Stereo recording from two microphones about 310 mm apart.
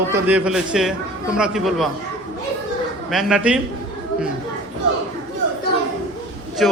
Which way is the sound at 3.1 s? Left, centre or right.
Centre.